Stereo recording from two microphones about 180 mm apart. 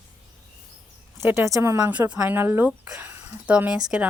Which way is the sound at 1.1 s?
15° right (ahead or behind).